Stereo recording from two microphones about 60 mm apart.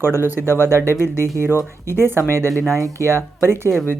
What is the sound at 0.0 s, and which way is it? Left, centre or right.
Speech, right.